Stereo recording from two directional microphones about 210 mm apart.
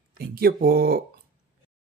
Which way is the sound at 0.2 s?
45° right (ahead or behind).